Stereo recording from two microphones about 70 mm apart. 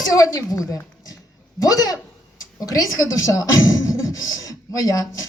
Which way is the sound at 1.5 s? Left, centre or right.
Left.